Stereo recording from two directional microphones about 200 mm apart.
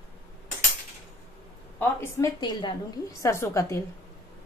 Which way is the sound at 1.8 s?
15° left (ahead or behind).